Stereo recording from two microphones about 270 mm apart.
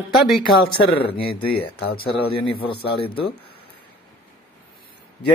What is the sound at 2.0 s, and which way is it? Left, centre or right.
Speech, centre.